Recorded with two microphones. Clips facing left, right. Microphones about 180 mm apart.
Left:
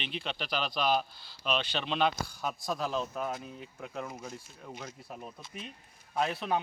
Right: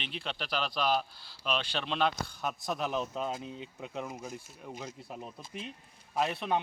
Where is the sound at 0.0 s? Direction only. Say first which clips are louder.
Left 1 dB; centre (ahead or behind).